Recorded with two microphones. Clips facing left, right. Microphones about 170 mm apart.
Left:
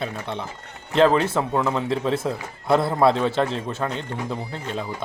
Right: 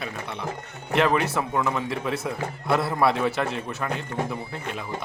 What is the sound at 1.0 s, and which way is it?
A man's voice, 25° left (ahead or behind).